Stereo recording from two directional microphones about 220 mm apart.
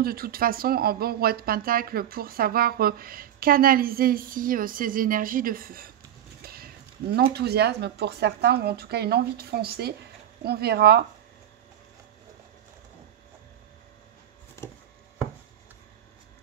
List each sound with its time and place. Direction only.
0.0 s speech: 40° right (ahead or behind)